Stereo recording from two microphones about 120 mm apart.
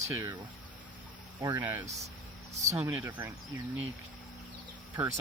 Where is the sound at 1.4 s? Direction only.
20° right (ahead or behind).